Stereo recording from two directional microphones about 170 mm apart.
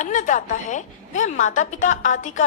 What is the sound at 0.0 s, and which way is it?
A woman's voice, 45° left (ahead or behind).